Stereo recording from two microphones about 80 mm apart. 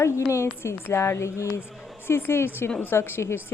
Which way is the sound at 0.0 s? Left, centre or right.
Left.